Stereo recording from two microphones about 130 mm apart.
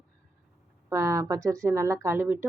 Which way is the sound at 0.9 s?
20° right (ahead or behind).